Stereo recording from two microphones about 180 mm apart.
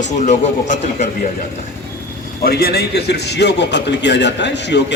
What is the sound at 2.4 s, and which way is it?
A man's voice, 60° left (ahead or behind).